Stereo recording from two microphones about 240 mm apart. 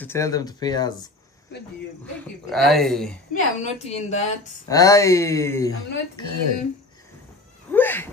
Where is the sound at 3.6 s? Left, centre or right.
Left.